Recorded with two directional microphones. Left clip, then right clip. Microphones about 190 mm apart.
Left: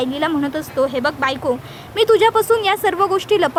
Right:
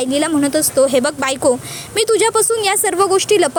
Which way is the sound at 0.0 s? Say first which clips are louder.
Right 3 dB; 20° right (ahead or behind).